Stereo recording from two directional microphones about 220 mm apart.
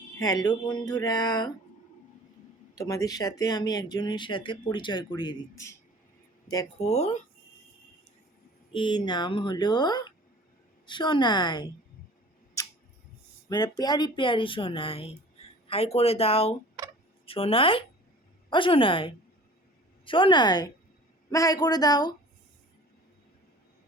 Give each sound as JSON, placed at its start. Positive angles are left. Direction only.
{"t": 0.2, "sound": "speech", "side_deg": 15}
{"t": 2.7, "sound": "speech", "side_deg": 15}
{"t": 6.8, "sound": "speech", "side_deg": 30}
{"t": 8.7, "sound": "speech", "side_deg": 20}
{"t": 13.5, "sound": "speech", "side_deg": 20}